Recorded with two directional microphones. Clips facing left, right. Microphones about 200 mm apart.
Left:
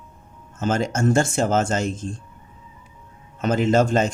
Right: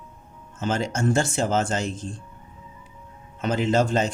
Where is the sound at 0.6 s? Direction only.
45° left (ahead or behind).